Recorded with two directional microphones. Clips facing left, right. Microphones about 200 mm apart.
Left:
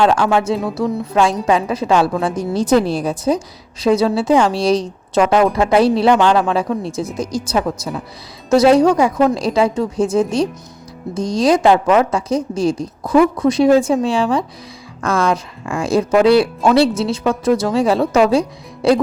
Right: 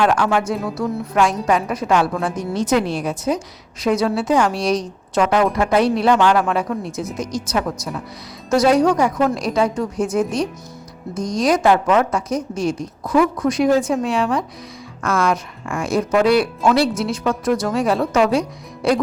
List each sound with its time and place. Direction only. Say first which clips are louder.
0.0 s a woman's voice: left 3 dB; 25° left (ahead or behind)
8.8 s speech: left 3 dB; 10° left (ahead or behind)
9.3 s a woman's voice: left 3 dB; 30° left (ahead or behind)